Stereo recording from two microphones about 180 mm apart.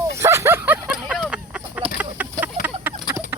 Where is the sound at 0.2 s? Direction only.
15° right (ahead or behind).